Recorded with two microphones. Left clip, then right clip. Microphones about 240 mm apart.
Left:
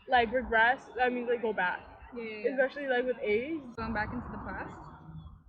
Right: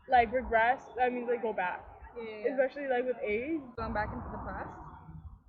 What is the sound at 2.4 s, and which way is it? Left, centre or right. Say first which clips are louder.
A woman's voice: left 1 dB; centre.